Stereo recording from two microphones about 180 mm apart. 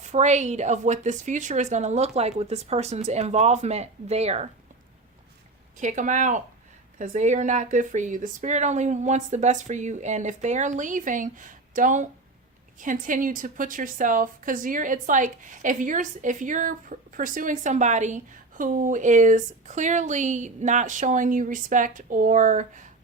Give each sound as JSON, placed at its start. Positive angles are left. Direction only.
{"t": 0.0, "sound": "a woman's voice", "side_deg": -40}
{"t": 5.7, "sound": "a woman's voice", "side_deg": -45}